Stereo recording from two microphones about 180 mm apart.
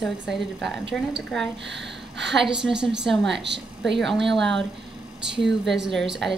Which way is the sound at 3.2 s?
75° right (ahead or behind).